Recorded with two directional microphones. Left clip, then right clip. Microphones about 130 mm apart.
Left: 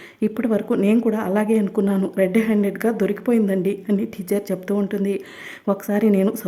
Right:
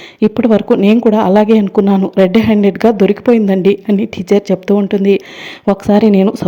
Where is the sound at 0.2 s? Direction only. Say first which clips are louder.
Right 11 dB; 35° right (ahead or behind).